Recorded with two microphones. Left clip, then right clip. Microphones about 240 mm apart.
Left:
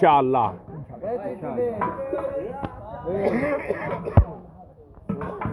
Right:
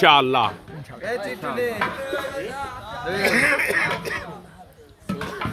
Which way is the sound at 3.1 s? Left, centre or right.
Centre.